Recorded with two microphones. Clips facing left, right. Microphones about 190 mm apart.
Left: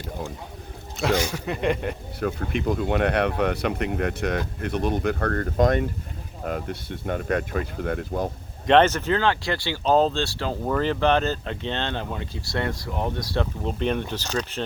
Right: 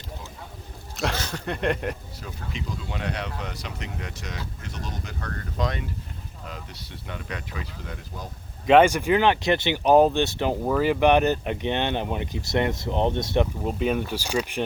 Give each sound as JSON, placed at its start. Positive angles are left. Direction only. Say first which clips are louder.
{"t": 1.1, "sound": "speech", "louder": "left 6 dB", "side_deg": 10}
{"t": 2.2, "sound": "speech", "louder": "left 11 dB", "side_deg": 60}
{"t": 8.6, "sound": "speech", "louder": "right 1 dB", "side_deg": -10}
{"t": 10.6, "sound": "speech", "louder": "right 1 dB", "side_deg": -5}
{"t": 13.7, "sound": "speech", "louder": "right 1 dB", "side_deg": -5}